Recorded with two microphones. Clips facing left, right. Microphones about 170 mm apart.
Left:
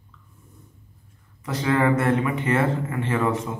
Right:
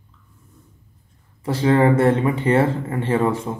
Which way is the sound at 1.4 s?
30° right (ahead or behind).